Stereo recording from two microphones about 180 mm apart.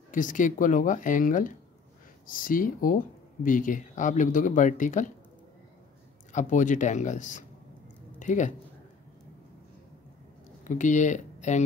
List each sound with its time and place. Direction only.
0.1 s speech: 45° left (ahead or behind)
6.3 s speech: 45° left (ahead or behind)
10.6 s speech: 45° left (ahead or behind)